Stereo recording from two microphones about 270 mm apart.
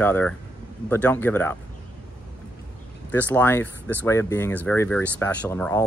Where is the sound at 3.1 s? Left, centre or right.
Centre.